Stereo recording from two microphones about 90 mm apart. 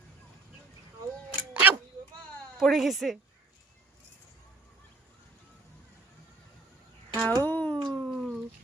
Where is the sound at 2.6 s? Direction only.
5° right (ahead or behind).